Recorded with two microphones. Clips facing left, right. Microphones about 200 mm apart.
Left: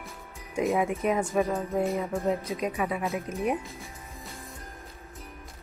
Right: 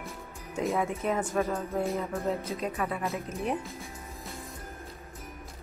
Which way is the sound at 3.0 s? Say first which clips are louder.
Left 3 dB; centre (ahead or behind).